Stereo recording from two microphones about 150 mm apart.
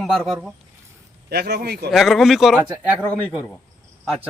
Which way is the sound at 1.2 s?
90° right.